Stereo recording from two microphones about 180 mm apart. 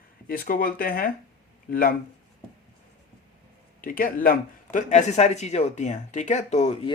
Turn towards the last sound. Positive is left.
turn(degrees=35)  # may be behind; listen again after turning